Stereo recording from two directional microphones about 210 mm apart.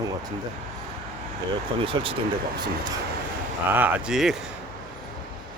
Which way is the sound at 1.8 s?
25° right (ahead or behind).